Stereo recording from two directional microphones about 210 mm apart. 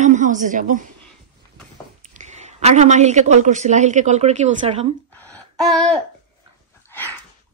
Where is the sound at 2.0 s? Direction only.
35° right (ahead or behind).